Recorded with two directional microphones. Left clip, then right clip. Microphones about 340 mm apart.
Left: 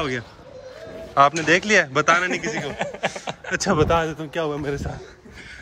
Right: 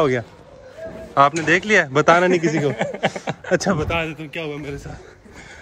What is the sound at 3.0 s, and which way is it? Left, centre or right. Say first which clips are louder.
Chuckle: right 4 dB; right.